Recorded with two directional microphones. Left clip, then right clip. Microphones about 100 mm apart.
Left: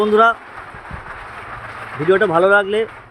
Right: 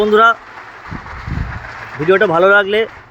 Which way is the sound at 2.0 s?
10° right (ahead or behind).